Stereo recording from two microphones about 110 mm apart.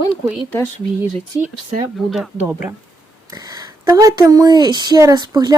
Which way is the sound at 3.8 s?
35° right (ahead or behind).